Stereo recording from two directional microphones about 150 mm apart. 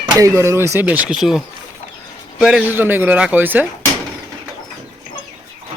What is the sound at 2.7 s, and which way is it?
Speech, 15° right (ahead or behind).